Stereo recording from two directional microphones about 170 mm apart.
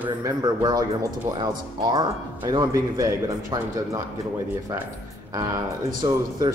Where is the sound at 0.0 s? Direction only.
20° right (ahead or behind).